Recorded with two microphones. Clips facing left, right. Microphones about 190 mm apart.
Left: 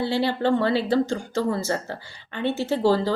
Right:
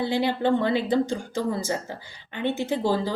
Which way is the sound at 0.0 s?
15° right (ahead or behind).